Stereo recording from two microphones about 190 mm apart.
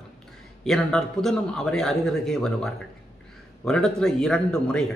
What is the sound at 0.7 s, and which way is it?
A man's voice, centre (ahead or behind).